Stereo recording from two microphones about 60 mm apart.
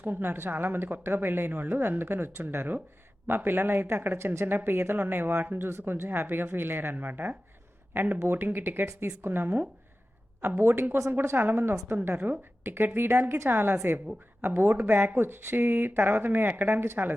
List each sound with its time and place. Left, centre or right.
0.0 s speech: right